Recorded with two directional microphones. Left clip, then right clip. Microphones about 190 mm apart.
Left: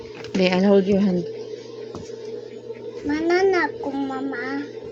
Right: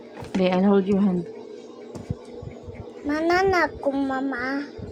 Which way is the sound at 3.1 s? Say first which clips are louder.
Left 1 dB; 45° right (ahead or behind).